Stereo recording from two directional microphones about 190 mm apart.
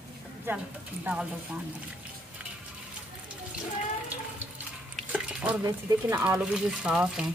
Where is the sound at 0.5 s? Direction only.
10° right (ahead or behind).